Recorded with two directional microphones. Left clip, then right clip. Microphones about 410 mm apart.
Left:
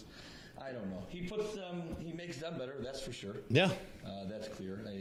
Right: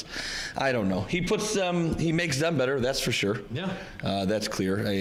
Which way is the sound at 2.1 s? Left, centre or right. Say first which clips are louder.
Right 16 dB; right.